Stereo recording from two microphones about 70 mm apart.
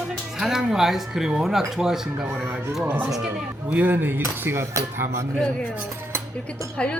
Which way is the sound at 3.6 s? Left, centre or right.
Right.